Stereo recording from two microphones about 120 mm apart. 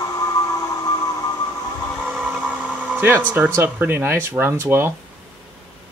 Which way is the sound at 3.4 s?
15° right (ahead or behind).